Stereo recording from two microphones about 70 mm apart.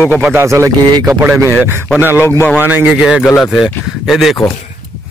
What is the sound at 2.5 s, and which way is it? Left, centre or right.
Speech, right.